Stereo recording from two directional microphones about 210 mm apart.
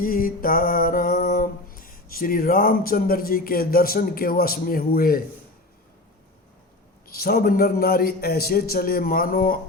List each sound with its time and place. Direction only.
0.0 s music: 45° left (ahead or behind)
7.1 s a man's voice: 45° left (ahead or behind)